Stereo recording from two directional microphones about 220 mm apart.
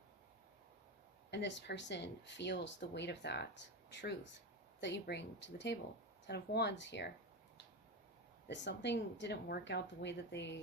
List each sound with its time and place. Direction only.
1.3 s speech: 55° left (ahead or behind)
8.4 s speech: 50° left (ahead or behind)